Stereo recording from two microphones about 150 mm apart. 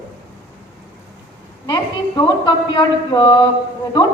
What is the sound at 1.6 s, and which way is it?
A woman's voice, 25° left (ahead or behind).